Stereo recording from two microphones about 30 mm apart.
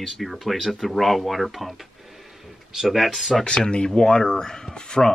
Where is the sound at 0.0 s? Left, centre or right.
Centre.